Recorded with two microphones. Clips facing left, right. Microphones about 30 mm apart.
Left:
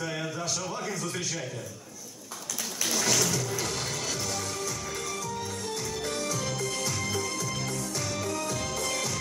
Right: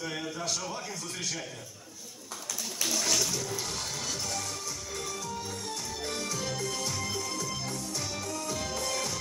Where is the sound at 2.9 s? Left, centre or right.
Centre.